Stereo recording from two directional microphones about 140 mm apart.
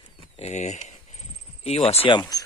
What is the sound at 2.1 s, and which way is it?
Speech, 25° left (ahead or behind).